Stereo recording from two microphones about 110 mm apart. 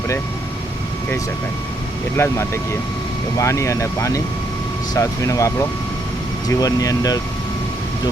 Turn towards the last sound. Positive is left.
turn(degrees=35)  # may be behind; listen again after turning